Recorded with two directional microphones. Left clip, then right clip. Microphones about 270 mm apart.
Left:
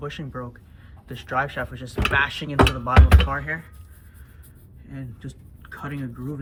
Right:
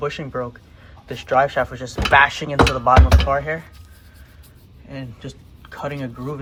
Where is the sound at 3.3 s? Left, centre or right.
Right.